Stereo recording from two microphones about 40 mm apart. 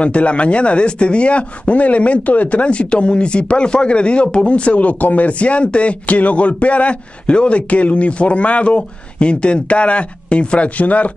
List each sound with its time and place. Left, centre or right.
0.0 s speech: left